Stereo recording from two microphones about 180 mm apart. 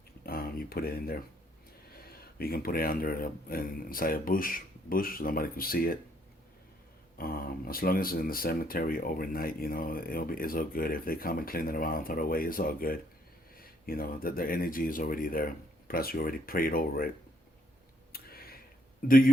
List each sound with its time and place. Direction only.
0.3 s a sound: 55° left (ahead or behind)
1.9 s speech: 60° left (ahead or behind)
7.2 s speech: 55° left (ahead or behind)
18.1 s tick: 55° left (ahead or behind)
19.0 s speech: 50° left (ahead or behind)